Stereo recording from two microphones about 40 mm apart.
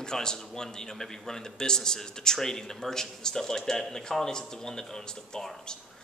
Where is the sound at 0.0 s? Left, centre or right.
Centre.